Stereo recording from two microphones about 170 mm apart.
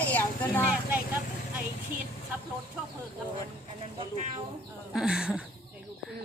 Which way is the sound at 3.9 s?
35° right (ahead or behind).